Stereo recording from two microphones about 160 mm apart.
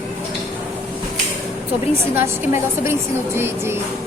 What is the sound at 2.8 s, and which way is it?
Speech, 15° right (ahead or behind).